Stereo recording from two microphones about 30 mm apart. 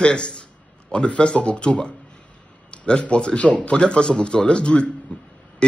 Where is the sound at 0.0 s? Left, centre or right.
Left.